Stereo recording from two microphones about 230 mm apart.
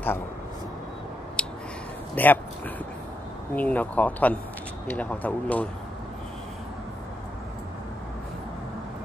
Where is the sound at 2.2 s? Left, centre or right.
Centre.